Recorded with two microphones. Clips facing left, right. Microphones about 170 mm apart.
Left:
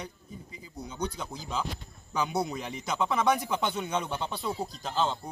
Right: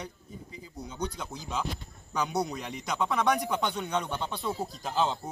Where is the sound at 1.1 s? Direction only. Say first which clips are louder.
Even; centre (ahead or behind).